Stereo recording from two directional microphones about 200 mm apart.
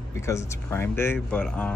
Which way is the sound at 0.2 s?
15° left (ahead or behind).